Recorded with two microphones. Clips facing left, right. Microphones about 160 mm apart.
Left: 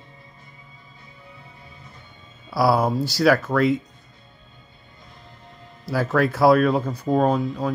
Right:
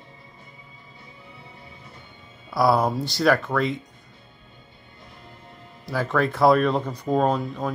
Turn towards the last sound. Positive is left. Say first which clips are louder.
# left 2 dB
turn(degrees=0)  # may be behind; listen again after turning